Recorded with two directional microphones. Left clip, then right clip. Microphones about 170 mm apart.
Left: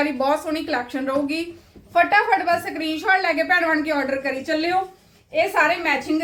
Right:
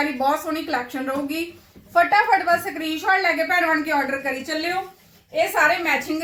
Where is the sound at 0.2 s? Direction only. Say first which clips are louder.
Even; 25° left (ahead or behind).